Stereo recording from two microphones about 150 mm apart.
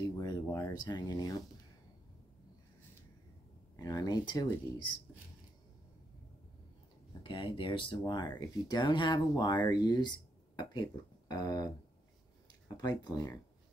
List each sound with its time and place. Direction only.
0.2 s speech: 25° left (ahead or behind)
3.7 s speech: 25° left (ahead or behind)
7.2 s speech: 35° left (ahead or behind)
12.7 s speech: 25° left (ahead or behind)